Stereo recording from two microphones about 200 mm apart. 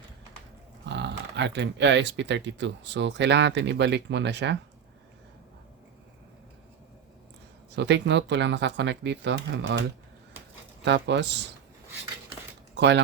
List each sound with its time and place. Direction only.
0.9 s speech: 60° right (ahead or behind)
7.8 s speech: 60° right (ahead or behind)
10.8 s speech: 60° right (ahead or behind)
12.7 s speech: 60° right (ahead or behind)